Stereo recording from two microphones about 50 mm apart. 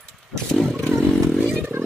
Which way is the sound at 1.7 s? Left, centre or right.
Right.